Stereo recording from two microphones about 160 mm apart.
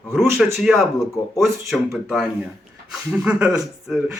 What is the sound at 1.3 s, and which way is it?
Speech, centre (ahead or behind).